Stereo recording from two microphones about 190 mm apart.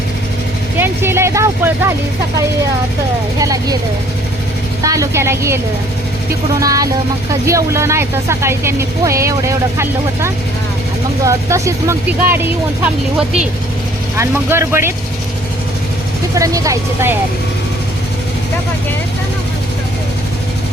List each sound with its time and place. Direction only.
0.8 s vehicle: 10° right (ahead or behind)
3.3 s speech: 20° right (ahead or behind)
4.8 s speech: 15° right (ahead or behind)
6.6 s speech: 20° right (ahead or behind)
14.2 s speech: 15° right (ahead or behind)
16.3 s speech: 15° right (ahead or behind)